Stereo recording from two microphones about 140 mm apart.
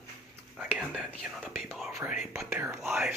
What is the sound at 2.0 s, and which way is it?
Speech, 20° right (ahead or behind).